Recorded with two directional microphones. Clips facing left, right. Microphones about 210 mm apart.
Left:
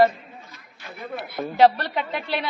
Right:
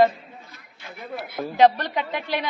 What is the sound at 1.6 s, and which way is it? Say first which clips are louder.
Speech: even; 15° right (ahead or behind).